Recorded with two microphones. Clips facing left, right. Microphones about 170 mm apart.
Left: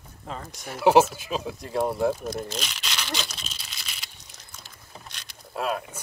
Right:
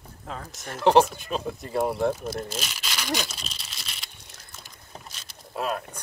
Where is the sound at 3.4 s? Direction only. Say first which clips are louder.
Right 1 dB; centre (ahead or behind).